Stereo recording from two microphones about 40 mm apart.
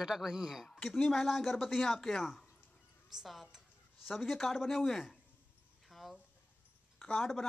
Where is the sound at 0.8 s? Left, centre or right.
Centre.